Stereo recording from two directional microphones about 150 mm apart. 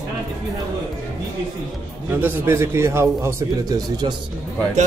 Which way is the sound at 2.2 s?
15° right (ahead or behind).